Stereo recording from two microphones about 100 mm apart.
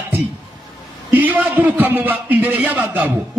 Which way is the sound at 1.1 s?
20° right (ahead or behind).